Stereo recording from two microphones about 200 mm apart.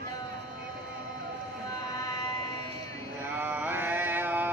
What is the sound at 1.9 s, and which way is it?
Vehicle, 20° left (ahead or behind).